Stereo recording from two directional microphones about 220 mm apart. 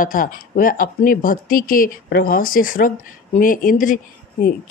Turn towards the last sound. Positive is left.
turn(degrees=40)  # may be behind; listen again after turning